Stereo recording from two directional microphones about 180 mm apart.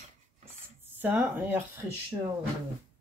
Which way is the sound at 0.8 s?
10° right (ahead or behind).